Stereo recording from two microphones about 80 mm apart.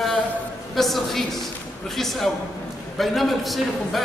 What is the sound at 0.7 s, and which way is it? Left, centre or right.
A man's voice, centre.